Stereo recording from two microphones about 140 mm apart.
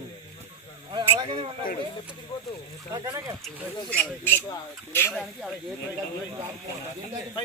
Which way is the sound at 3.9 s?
10° left (ahead or behind).